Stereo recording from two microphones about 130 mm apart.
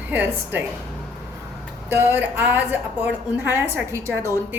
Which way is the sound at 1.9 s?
20° right (ahead or behind).